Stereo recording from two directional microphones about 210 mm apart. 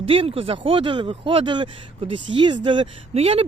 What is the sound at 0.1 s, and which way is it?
Speech, 25° right (ahead or behind).